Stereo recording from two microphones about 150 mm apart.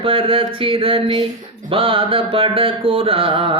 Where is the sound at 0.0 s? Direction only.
35° right (ahead or behind).